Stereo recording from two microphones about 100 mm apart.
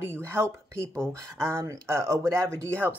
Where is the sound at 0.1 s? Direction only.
25° right (ahead or behind).